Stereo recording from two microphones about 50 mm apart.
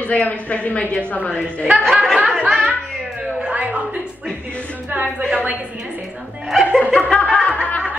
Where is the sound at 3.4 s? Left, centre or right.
Right.